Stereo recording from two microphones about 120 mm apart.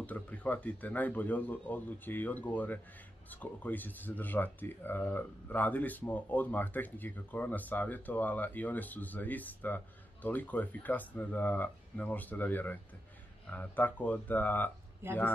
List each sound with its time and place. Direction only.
0.0 s speech: 10° left (ahead or behind)
15.0 s speech: 20° right (ahead or behind)